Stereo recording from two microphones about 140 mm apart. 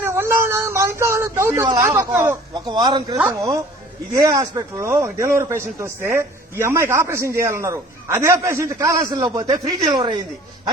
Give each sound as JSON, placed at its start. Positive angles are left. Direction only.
{"t": 0.0, "sound": "speech", "side_deg": -15}
{"t": 2.6, "sound": "a man's voice", "side_deg": -30}